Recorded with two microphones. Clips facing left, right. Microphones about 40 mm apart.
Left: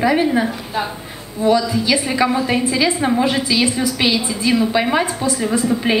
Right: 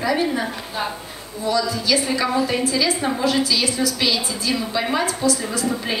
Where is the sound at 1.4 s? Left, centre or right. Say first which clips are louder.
Left 6 dB; left.